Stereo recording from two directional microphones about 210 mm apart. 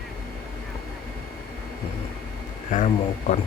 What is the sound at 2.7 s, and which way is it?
Speech, 35° left (ahead or behind).